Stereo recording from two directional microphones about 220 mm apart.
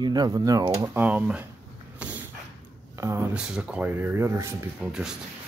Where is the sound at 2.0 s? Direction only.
5° right (ahead or behind).